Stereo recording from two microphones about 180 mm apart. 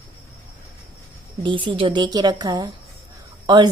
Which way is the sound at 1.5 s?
25° right (ahead or behind).